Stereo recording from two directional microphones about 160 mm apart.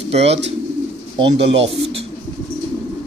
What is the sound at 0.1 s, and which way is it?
Speech, 40° right (ahead or behind).